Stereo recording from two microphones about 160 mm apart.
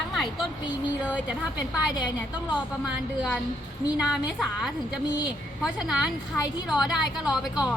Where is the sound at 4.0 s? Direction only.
5° right (ahead or behind).